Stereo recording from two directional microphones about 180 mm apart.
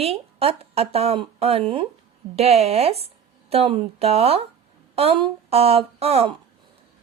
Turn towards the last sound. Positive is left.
turn(degrees=-35)  # may be behind; listen again after turning